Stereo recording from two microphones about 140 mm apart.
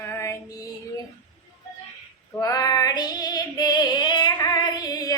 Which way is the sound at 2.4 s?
25° left (ahead or behind).